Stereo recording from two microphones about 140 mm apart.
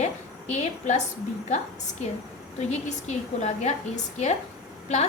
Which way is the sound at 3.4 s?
55° left (ahead or behind).